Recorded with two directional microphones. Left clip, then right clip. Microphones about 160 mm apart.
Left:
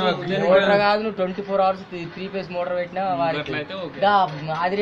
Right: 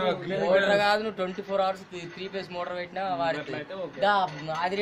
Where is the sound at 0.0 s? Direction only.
45° right (ahead or behind).